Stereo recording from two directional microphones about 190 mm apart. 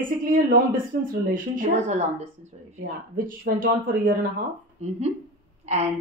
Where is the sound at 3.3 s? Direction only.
45° right (ahead or behind).